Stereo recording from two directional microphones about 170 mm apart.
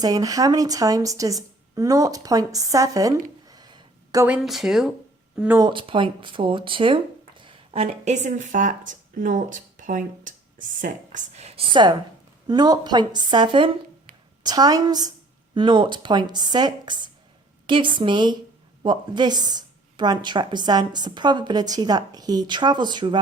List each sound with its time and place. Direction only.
0.0 s speech: 20° right (ahead or behind)
3.4 s a sound: 25° right (ahead or behind)
4.3 s speech: centre (ahead or behind)
5.5 s speech: 25° right (ahead or behind)